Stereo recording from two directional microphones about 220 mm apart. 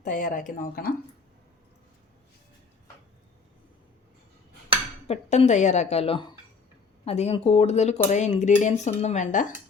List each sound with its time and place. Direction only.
0.0 s speech: 35° left (ahead or behind)
5.0 s speech: 30° left (ahead or behind)